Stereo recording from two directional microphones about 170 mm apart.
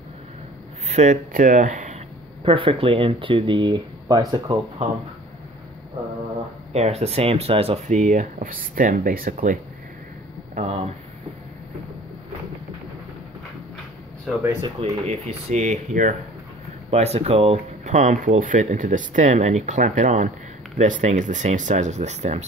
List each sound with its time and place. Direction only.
0.8 s speech: 45° right (ahead or behind)
2.4 s speech: 30° right (ahead or behind)
6.7 s speech: 40° right (ahead or behind); by 9.6 s 55° right (ahead or behind)
10.5 s speech: 40° right (ahead or behind)
14.6 s speech: 40° right (ahead or behind)
16.9 s speech: 40° right (ahead or behind)